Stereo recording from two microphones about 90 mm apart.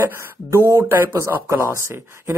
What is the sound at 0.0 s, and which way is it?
Speech, 30° right (ahead or behind).